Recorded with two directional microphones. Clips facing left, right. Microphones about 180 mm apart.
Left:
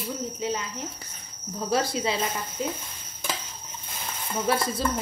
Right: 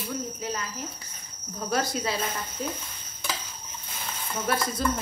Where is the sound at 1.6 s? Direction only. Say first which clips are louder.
Left 2 dB; 25° left (ahead or behind).